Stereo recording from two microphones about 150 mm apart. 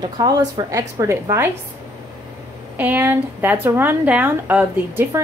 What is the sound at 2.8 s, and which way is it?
A woman's voice, 15° right (ahead or behind).